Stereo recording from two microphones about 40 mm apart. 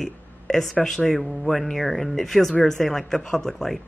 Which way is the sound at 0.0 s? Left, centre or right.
Centre.